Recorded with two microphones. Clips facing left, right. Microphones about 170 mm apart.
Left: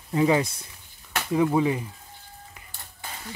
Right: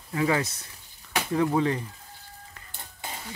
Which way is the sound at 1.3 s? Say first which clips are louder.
Left 2 dB; 10° left (ahead or behind).